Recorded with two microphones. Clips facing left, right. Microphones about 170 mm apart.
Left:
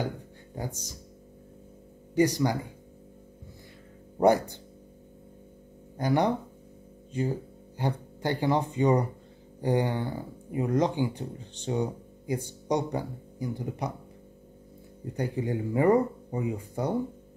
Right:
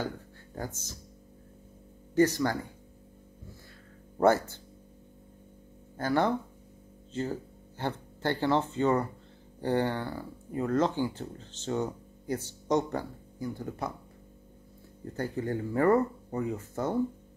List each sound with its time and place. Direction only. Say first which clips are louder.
0.6 s speech: left 2 dB; 15° left (ahead or behind)
2.1 s speech: left 1 dB; 15° left (ahead or behind)
4.2 s speech: left 2 dB; 15° left (ahead or behind)
5.9 s speech: left 2 dB; 15° left (ahead or behind)
15.1 s speech: left 2 dB; 15° left (ahead or behind)